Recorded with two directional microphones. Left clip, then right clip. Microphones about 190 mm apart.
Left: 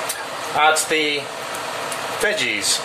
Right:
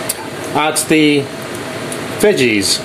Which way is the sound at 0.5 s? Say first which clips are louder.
Right 3 dB; 40° right (ahead or behind).